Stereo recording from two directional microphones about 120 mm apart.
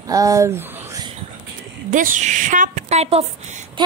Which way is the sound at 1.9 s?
90° right.